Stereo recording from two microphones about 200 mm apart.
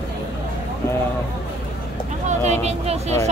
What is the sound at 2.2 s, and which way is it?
Speech, 35° right (ahead or behind).